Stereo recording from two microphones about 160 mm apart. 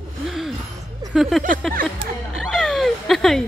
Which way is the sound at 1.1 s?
Centre (ahead or behind).